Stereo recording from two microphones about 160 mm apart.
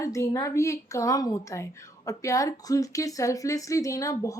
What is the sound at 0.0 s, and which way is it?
Speech, 20° left (ahead or behind).